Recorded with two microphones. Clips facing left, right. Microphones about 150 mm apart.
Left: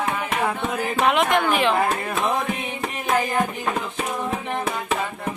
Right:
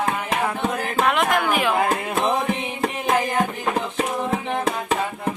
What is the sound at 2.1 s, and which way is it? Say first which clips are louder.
Carnatic music: right 2 dB; 35° right (ahead or behind).